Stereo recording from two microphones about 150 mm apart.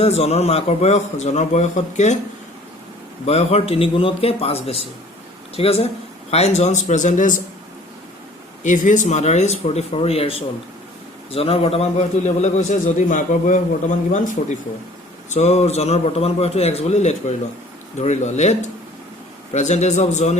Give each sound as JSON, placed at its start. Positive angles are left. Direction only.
{"t": 0.0, "sound": "a man's voice", "side_deg": 45}
{"t": 3.2, "sound": "a man's voice", "side_deg": 45}
{"t": 8.6, "sound": "a man's voice", "side_deg": 55}
{"t": 15.3, "sound": "a man's voice", "side_deg": 45}
{"t": 19.5, "sound": "a man's voice", "side_deg": 50}